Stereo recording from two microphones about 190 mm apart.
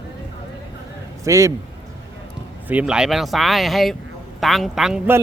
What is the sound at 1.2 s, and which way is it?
Speech, 15° right (ahead or behind).